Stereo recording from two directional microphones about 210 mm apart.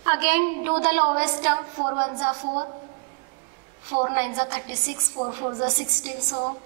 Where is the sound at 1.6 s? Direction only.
25° right (ahead or behind).